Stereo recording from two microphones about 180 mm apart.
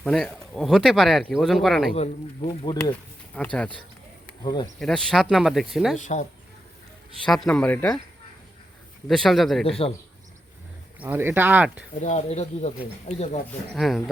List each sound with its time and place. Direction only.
0.0 s speech: centre (ahead or behind)
2.0 s speech: 35° left (ahead or behind)
3.3 s speech: 5° left (ahead or behind)
4.4 s speech: 20° left (ahead or behind)
4.8 s speech: centre (ahead or behind)
7.5 s speech: 10° left (ahead or behind)
9.0 s speech: centre (ahead or behind)
9.6 s speech: 30° left (ahead or behind)
11.0 s speech: 10° right (ahead or behind)
12.0 s speech: 40° left (ahead or behind)
13.7 s speech: centre (ahead or behind)